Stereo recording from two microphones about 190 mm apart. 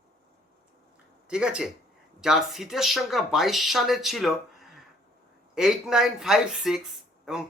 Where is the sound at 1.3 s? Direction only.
5° right (ahead or behind).